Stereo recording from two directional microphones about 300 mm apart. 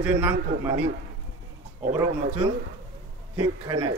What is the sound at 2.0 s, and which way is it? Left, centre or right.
Speech, centre.